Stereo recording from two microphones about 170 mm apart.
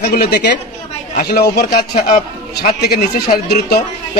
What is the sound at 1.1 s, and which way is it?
Speech, 65° left (ahead or behind).